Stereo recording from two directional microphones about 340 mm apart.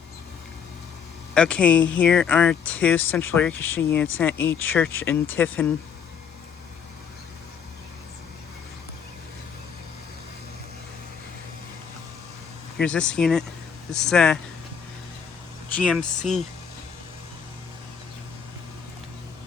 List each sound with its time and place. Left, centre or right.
1.3 s speech: centre
12.8 s speech: centre
15.7 s speech: centre